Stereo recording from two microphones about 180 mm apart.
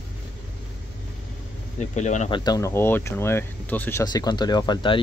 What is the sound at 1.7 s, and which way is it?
Speech, 40° left (ahead or behind).